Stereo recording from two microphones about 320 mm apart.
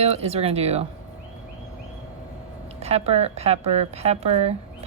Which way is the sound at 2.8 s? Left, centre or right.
Centre.